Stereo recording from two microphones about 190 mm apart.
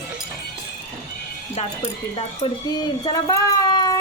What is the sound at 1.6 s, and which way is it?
Speech, 30° left (ahead or behind).